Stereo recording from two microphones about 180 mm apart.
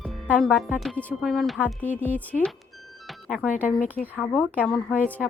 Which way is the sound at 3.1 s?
Centre (ahead or behind).